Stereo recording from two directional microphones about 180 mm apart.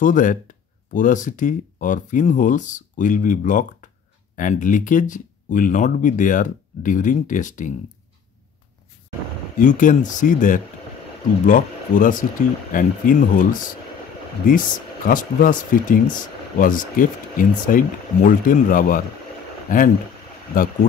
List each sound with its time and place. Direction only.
0.0 s speech: 45° left (ahead or behind)
9.6 s speech: 45° left (ahead or behind)